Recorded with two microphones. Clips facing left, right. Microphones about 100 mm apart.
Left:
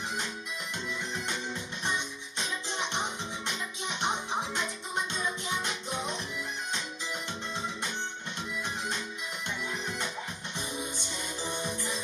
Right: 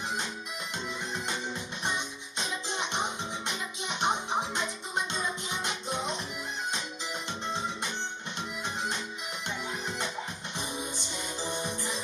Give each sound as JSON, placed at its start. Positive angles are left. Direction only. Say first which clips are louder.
{"t": 3.4, "sound": "music", "louder": "right 1 dB", "side_deg": -20}